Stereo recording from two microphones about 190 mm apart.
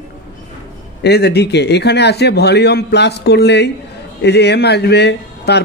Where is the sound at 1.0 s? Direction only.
60° left (ahead or behind).